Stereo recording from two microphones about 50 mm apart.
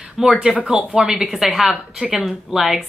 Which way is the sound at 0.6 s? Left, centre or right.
Right.